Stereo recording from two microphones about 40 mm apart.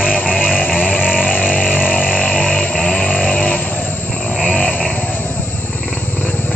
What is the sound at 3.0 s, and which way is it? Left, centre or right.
Vehicle, left.